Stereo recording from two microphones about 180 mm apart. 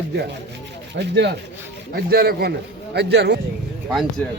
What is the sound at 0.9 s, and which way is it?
Speech, 75° right (ahead or behind).